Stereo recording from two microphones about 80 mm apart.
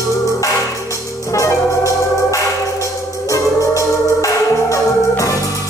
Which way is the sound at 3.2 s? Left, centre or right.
Left.